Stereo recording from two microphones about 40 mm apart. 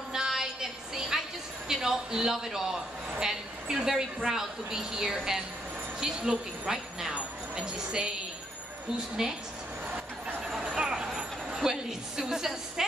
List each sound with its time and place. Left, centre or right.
0.3 s a sound: centre
1.7 s a man's voice: centre
6.7 s jingle bell: centre
7.5 s a woman's voice: centre
9.2 s a man's voice: centre
10.5 s vehicle: centre